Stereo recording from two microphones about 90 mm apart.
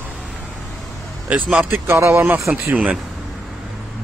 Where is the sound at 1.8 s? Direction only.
30° right (ahead or behind).